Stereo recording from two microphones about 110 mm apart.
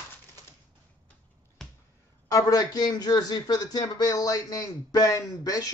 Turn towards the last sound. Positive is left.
turn(degrees=35)  # may be behind; listen again after turning